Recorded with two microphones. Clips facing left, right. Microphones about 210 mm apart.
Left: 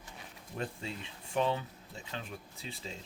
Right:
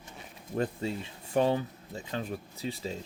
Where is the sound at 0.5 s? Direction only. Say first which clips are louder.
Right 8 dB; 40° right (ahead or behind).